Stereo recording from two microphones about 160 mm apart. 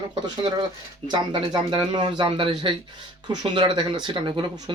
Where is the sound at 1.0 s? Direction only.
30° right (ahead or behind).